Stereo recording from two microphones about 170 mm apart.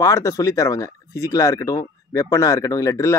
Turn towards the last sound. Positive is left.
turn(degrees=20)  # may be behind; listen again after turning